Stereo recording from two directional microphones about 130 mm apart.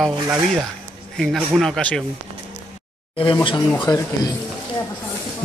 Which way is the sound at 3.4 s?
35° left (ahead or behind).